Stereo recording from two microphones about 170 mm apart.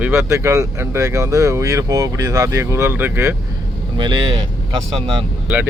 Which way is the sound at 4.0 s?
30° right (ahead or behind).